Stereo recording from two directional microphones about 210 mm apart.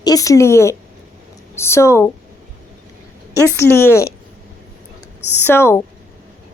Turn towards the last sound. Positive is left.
turn(degrees=10)  # may be behind; listen again after turning